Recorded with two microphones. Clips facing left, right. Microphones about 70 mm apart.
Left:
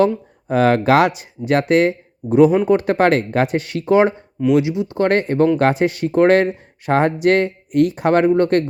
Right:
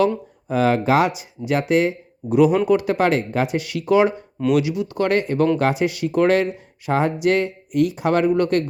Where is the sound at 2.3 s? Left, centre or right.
Left.